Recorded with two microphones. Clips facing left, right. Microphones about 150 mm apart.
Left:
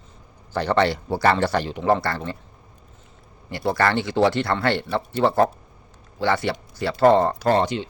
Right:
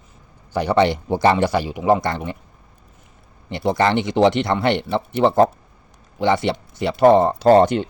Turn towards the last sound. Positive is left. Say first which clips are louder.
# right 7 dB
turn(degrees=-50)  # may be behind; listen again after turning